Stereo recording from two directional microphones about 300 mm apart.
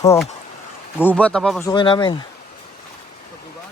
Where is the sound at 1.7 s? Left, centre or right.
Centre.